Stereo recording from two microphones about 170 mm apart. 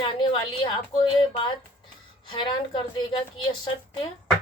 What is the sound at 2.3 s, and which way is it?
Speech, 25° left (ahead or behind).